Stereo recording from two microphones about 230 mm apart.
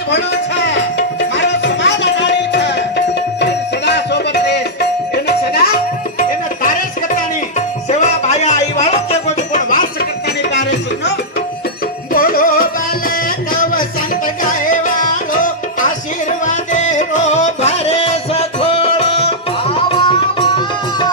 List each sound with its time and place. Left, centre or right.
0.1 s music: left
7.9 s music: left
12.1 s music: left
14.4 s music: left